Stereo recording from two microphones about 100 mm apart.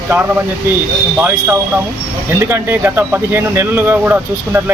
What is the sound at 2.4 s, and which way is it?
Speech, 20° right (ahead or behind).